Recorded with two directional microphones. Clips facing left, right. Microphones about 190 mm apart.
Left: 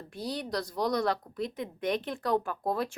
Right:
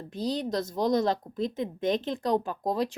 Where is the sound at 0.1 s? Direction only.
20° right (ahead or behind).